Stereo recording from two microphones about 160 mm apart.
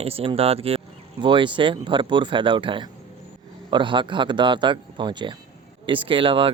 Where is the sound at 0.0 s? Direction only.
35° right (ahead or behind).